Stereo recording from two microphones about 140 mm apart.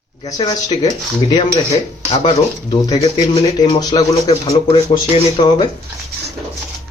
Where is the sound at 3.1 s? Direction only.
40° left (ahead or behind).